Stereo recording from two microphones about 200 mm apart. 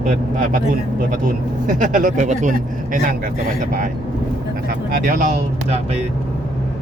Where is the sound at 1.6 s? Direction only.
40° right (ahead or behind).